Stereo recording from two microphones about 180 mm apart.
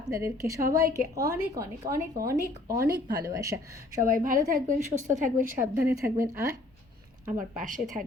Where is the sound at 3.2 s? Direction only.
20° right (ahead or behind).